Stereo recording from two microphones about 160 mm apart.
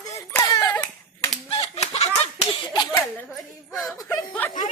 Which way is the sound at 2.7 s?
20° left (ahead or behind).